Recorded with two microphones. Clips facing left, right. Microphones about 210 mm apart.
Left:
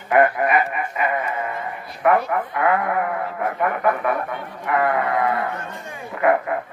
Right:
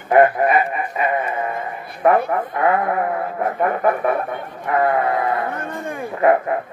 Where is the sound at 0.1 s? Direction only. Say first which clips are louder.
Right 3 dB; 35° right (ahead or behind).